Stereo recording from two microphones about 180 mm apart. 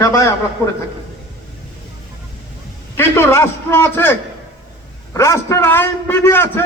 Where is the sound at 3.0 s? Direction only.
15° left (ahead or behind).